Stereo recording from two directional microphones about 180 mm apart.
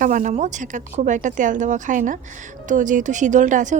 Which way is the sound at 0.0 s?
45° right (ahead or behind).